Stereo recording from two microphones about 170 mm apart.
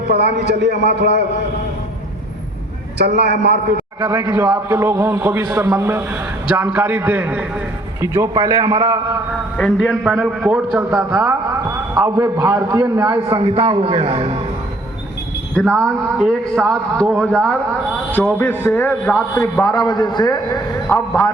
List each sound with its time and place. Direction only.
0.1 s a man's voice: 75° right (ahead or behind)
3.0 s a man's voice: 80° right
4.0 s a man's voice: 15° right (ahead or behind)
9.6 s a man's voice: centre (ahead or behind)
11.9 s a man's voice: 15° right (ahead or behind); by 14.3 s 35° right (ahead or behind)
15.5 s a man's voice: 5° left (ahead or behind); by 20.6 s 25° left (ahead or behind)